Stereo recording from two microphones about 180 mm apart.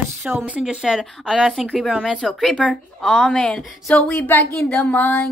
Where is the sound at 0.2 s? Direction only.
5° right (ahead or behind).